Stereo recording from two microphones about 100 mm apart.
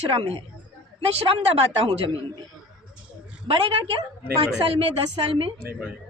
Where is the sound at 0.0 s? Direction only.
70° right (ahead or behind).